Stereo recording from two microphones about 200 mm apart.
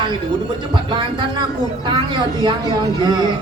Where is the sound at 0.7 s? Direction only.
25° right (ahead or behind).